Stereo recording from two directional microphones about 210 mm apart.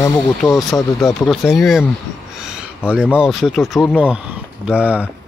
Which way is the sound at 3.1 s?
Centre (ahead or behind).